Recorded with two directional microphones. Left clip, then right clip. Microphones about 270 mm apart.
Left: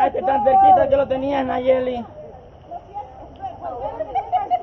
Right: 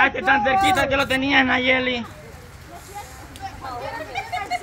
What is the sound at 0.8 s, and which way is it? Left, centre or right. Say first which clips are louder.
A man's voice: left 3 dB; right.